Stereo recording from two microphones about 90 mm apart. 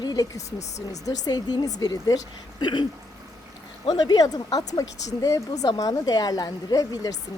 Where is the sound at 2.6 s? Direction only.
55° left (ahead or behind).